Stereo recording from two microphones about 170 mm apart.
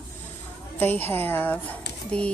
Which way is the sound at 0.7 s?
10° left (ahead or behind).